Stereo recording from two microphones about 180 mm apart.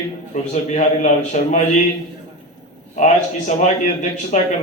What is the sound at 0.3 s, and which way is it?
A man's voice, 40° left (ahead or behind).